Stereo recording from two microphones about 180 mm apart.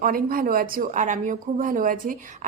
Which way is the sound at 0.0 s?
50° right (ahead or behind).